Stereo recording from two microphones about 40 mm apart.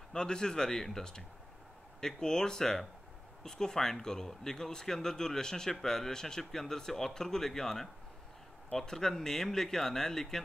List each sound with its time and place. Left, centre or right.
0.1 s speech: centre